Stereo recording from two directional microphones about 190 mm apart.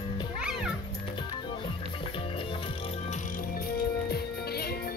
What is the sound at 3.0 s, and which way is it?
Music, 45° left (ahead or behind).